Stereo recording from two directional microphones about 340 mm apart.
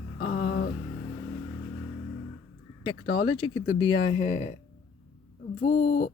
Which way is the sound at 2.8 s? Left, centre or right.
Centre.